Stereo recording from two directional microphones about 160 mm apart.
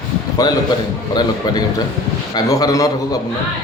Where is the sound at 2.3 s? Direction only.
25° left (ahead or behind).